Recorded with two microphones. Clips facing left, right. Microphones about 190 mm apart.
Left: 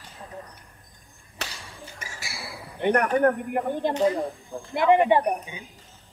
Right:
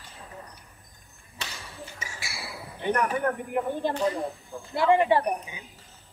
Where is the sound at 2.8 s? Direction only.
60° left (ahead or behind).